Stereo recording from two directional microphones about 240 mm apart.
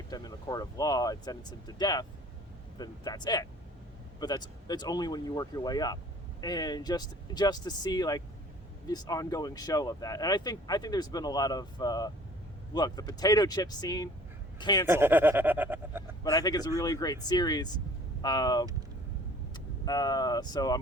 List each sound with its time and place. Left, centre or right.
0.1 s speech: centre
14.8 s speech: centre
16.2 s speech: centre